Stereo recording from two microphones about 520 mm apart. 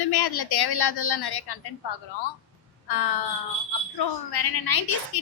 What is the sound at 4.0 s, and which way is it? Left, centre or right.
A woman's voice, left.